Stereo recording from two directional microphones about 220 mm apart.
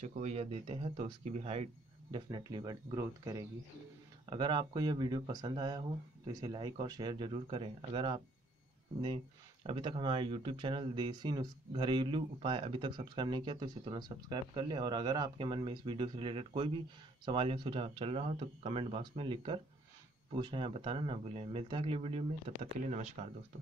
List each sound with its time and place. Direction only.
0.0 s speech: 30° right (ahead or behind)